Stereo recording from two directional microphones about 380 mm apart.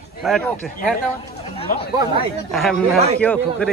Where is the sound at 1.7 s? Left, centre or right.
Left.